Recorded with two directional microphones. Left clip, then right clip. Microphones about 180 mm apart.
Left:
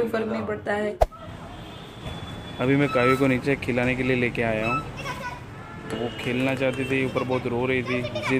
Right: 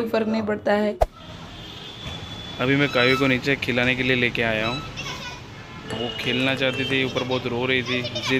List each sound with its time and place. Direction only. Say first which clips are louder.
0.1 s speech: right 4 dB; 50° right (ahead or behind)
2.6 s speech: right 2 dB; centre (ahead or behind)
6.1 s speech: right 4 dB; centre (ahead or behind)